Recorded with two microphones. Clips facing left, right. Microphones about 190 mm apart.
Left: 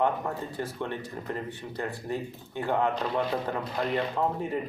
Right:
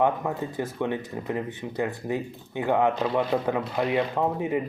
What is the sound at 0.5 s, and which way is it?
Speech, 15° right (ahead or behind).